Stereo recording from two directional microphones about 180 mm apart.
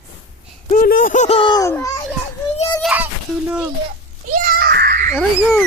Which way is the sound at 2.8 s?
10° right (ahead or behind).